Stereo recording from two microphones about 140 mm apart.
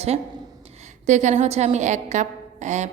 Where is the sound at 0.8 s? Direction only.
60° right (ahead or behind).